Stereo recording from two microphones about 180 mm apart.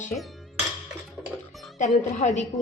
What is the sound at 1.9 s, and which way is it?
Speech, 40° left (ahead or behind).